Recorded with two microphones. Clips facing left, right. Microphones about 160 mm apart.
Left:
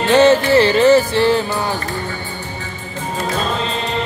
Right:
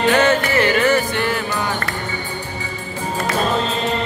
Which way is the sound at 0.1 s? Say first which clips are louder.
Left 9 dB; 30° left (ahead or behind).